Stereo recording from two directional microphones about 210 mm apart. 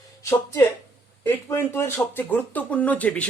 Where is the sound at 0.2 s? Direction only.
15° left (ahead or behind).